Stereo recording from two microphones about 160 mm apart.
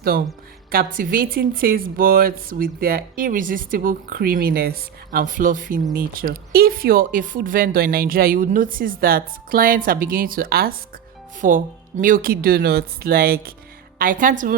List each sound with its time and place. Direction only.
0.0 s a woman's voice: 70° right (ahead or behind)
11.3 s speech: 55° right (ahead or behind)
14.0 s a woman's voice: 60° right (ahead or behind)